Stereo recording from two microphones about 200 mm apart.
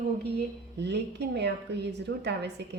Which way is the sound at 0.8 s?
60° right (ahead or behind).